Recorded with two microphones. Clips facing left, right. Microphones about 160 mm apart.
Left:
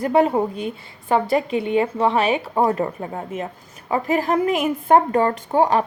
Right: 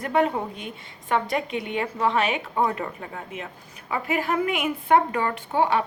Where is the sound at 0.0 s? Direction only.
35° left (ahead or behind).